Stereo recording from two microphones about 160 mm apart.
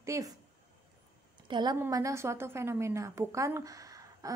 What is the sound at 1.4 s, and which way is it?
A woman's voice, 30° right (ahead or behind).